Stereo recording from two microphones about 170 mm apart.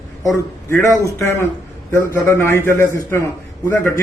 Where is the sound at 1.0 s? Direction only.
15° left (ahead or behind).